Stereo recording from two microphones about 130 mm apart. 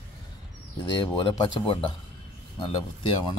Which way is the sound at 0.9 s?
40° left (ahead or behind).